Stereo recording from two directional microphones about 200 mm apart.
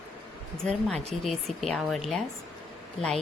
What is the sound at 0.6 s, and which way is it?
Speech, centre (ahead or behind).